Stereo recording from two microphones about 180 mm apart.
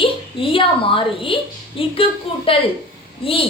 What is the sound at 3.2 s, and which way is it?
Speech, 30° left (ahead or behind).